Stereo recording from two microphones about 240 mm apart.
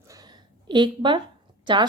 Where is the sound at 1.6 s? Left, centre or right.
Centre.